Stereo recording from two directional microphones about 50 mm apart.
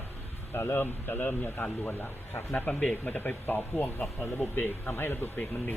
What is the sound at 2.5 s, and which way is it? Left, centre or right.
Speech, left.